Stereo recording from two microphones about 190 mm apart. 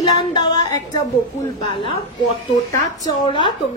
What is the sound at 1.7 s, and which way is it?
Speech, 25° left (ahead or behind).